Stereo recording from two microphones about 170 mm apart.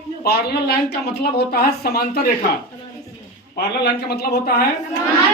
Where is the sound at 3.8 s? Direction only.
70° left (ahead or behind).